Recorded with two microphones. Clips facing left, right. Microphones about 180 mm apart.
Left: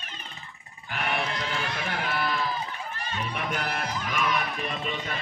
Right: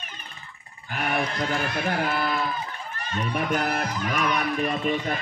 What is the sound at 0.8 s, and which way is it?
Speech, 45° right (ahead or behind).